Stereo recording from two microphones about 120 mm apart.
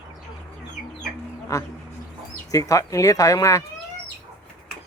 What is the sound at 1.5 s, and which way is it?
Speech, 25° left (ahead or behind).